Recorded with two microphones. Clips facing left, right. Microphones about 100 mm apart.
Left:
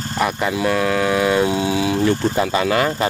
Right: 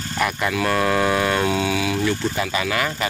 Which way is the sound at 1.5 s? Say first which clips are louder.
Left 3 dB; 25° left (ahead or behind).